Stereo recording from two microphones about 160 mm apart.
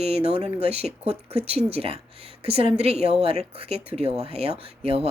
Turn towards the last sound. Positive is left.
turn(degrees=-40)  # may be behind; listen again after turning